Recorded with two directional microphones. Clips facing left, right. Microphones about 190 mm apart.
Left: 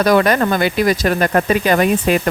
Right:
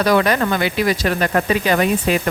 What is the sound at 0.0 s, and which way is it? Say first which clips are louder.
Speech: left 3 dB; 45° left (ahead or behind).